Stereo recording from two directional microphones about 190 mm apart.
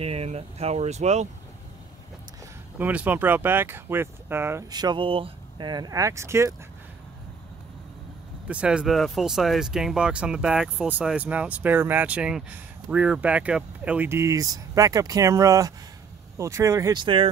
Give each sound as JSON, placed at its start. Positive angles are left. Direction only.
{"t": 0.0, "sound": "speech", "side_deg": -30}
{"t": 2.8, "sound": "speech", "side_deg": -10}
{"t": 8.5, "sound": "speech", "side_deg": -5}